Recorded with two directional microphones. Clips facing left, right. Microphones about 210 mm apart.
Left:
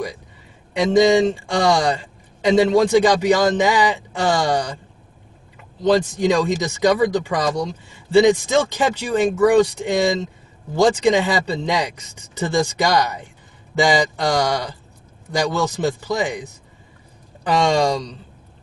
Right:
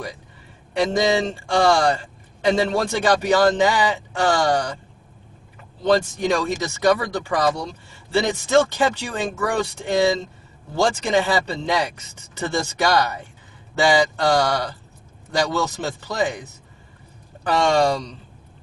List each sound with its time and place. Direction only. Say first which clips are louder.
0.7 s a man's voice: left 5 dB; 15° left (ahead or behind)
5.8 s a man's voice: left 2 dB; 15° left (ahead or behind)